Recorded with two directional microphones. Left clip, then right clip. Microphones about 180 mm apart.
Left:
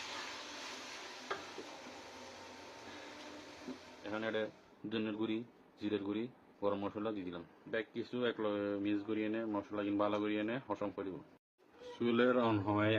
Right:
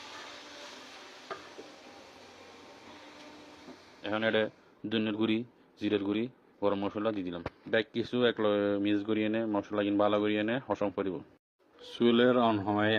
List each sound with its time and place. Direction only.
4.0 s speech: 40° right (ahead or behind); by 13.0 s 25° right (ahead or behind)